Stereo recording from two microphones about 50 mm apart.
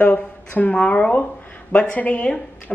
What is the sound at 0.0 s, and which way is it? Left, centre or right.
A woman's voice, left.